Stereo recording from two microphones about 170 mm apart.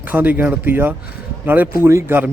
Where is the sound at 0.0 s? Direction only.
10° right (ahead or behind).